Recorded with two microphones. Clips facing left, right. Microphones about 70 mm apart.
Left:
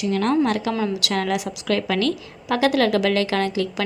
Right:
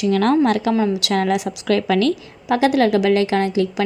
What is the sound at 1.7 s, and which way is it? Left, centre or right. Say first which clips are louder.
Speech: right 4 dB; right.